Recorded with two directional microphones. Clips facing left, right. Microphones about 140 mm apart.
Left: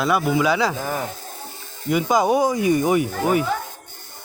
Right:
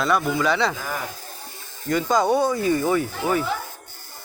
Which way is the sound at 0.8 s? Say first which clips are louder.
Left 4 dB; 15° left (ahead or behind).